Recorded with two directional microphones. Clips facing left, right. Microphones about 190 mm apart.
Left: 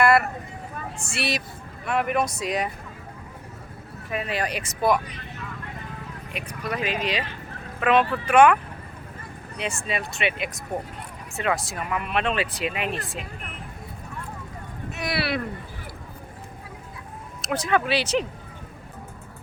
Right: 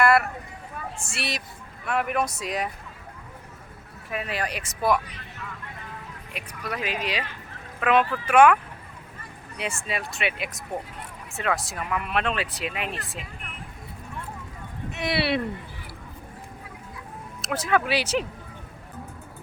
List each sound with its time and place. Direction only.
0.0 s vehicle: centre (ahead or behind)
1.1 s speech: centre (ahead or behind)
4.1 s speech: centre (ahead or behind)
6.3 s speech: 5° right (ahead or behind)
9.6 s speech: 5° right (ahead or behind)
14.9 s speech: 25° right (ahead or behind)
17.4 s speech: 5° right (ahead or behind)